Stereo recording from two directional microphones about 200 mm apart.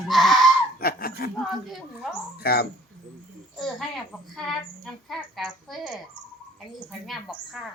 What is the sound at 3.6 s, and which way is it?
A woman's voice, centre (ahead or behind).